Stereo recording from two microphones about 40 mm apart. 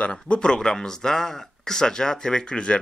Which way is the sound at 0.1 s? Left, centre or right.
Left.